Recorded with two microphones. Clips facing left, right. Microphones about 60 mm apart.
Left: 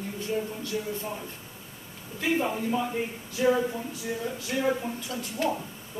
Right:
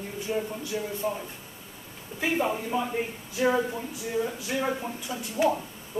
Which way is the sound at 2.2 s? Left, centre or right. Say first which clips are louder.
Even; centre.